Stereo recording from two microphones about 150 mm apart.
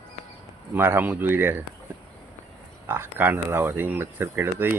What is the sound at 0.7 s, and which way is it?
Speech, 15° right (ahead or behind).